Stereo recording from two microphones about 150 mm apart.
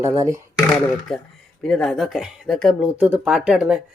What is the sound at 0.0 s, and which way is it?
Speech, 20° right (ahead or behind).